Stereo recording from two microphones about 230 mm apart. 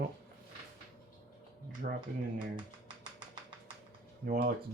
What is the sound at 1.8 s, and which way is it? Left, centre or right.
Speech, right.